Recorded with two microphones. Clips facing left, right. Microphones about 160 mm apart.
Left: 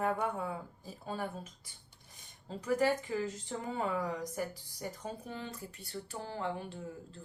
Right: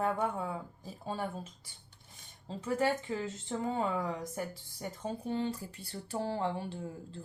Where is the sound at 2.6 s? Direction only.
25° right (ahead or behind).